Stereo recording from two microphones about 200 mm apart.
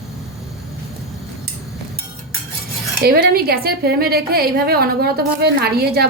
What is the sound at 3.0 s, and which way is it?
A woman's voice, 50° right (ahead or behind).